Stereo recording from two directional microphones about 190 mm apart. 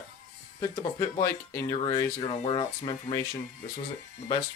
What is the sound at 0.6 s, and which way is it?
Speech, 20° left (ahead or behind).